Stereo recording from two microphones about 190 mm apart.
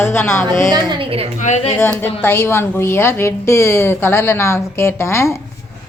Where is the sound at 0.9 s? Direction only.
30° right (ahead or behind).